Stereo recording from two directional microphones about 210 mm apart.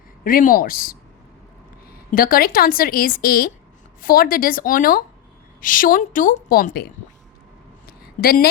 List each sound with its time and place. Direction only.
0.3 s a woman's voice: 40° left (ahead or behind)
2.1 s a woman's voice: 45° left (ahead or behind)
7.9 s a sound: 45° left (ahead or behind)